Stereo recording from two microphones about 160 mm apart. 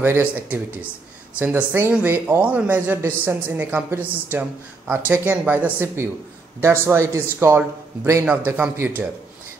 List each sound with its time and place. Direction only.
0.0 s a man's voice: 10° right (ahead or behind)